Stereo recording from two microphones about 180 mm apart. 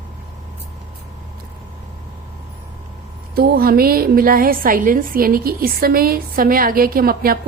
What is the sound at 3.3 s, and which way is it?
A woman's voice, 60° right (ahead or behind).